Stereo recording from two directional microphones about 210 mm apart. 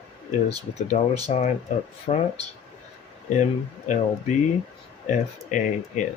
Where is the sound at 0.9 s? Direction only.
25° left (ahead or behind).